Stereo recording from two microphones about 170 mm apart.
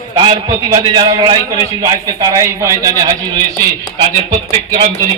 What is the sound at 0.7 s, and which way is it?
A man's voice, 25° right (ahead or behind).